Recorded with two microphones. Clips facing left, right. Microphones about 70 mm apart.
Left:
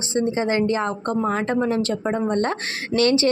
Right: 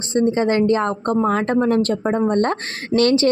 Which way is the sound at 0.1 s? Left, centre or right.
Right.